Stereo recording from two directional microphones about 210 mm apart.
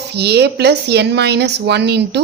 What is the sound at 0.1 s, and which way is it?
A woman's voice, 50° right (ahead or behind).